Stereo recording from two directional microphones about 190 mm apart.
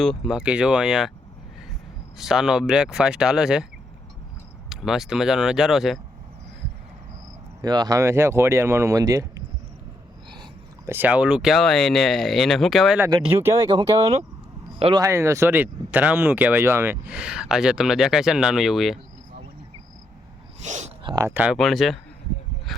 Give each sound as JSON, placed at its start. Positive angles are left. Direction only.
{"t": 0.0, "sound": "speech", "side_deg": 0}
{"t": 2.1, "sound": "speech", "side_deg": 0}
{"t": 4.7, "sound": "speech", "side_deg": 0}
{"t": 7.6, "sound": "speech", "side_deg": -20}
{"t": 10.4, "sound": "speech", "side_deg": -10}
{"t": 13.3, "sound": "speech", "side_deg": -15}
{"t": 13.7, "sound": "speech", "side_deg": -25}
{"t": 15.0, "sound": "speech", "side_deg": -15}
{"t": 20.7, "sound": "speech", "side_deg": -40}
{"t": 21.0, "sound": "speech", "side_deg": -20}